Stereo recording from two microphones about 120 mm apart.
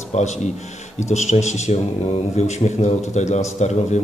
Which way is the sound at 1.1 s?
75° left (ahead or behind).